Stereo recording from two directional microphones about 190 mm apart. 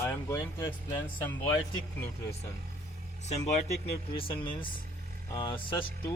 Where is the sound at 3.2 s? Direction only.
35° left (ahead or behind).